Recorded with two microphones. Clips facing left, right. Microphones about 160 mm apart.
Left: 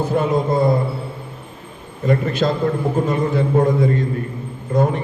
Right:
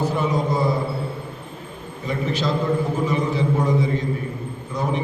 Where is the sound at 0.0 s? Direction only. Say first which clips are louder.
Left 4 dB; 55° left (ahead or behind).